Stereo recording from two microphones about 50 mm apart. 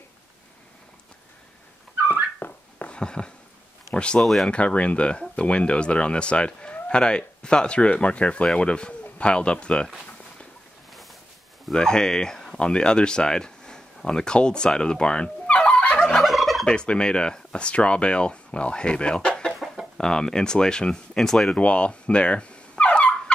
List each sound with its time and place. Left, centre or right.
2.3 s a sound: left
2.9 s a sound: centre
3.9 s speech: left
4.2 s speech: centre
4.5 s speech: left
11.7 s speech: centre
16.0 s gobble: centre
16.6 s speech: centre
19.6 s chicken: centre
20.0 s speech: centre
21.5 s turkey: left